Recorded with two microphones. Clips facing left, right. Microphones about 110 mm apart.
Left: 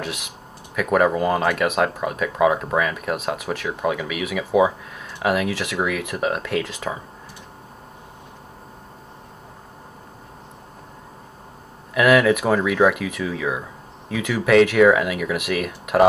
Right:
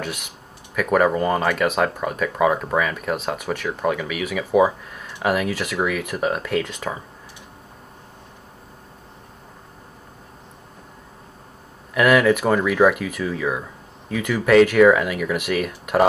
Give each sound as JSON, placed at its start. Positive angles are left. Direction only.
{"t": 0.0, "sound": "speech", "side_deg": 0}
{"t": 11.9, "sound": "speech", "side_deg": 0}